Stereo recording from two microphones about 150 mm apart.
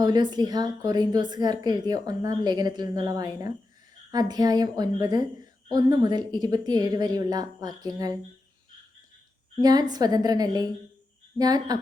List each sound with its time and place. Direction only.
0.0 s a woman's voice: 30° right (ahead or behind)
9.6 s a woman's voice: 25° right (ahead or behind)